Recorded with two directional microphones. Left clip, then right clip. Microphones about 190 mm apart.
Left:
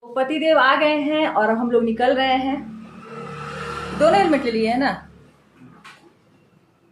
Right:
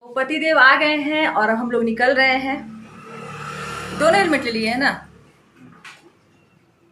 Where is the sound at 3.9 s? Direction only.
15° left (ahead or behind).